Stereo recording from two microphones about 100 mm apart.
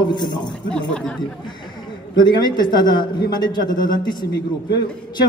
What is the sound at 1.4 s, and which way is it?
A man's voice, 50° left (ahead or behind).